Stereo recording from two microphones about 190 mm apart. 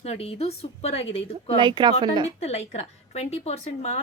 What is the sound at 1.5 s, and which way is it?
Speech, 25° right (ahead or behind).